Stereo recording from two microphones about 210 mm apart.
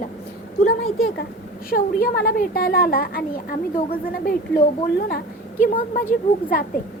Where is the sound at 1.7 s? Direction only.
45° left (ahead or behind).